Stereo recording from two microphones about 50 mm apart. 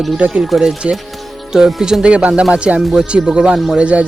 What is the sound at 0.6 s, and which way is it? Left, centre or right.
Speech, centre.